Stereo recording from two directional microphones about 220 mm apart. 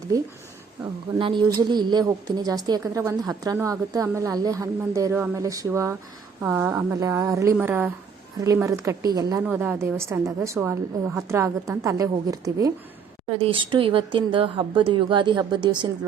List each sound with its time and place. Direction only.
1.2 s a woman's voice: 20° right (ahead or behind)